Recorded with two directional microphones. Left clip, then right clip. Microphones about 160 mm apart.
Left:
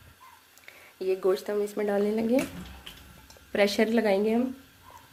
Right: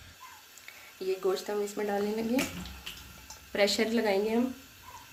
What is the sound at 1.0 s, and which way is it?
Speech, 65° left (ahead or behind).